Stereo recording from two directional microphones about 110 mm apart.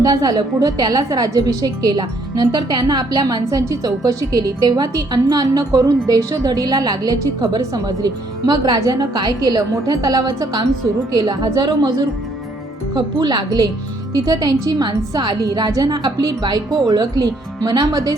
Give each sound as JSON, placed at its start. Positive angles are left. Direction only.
{"t": 0.0, "sound": "a woman's voice", "side_deg": -35}